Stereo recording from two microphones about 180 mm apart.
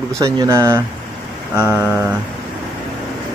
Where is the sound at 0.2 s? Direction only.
15° right (ahead or behind).